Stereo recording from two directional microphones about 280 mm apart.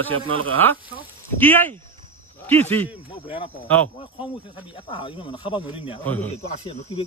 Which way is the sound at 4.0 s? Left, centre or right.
Centre.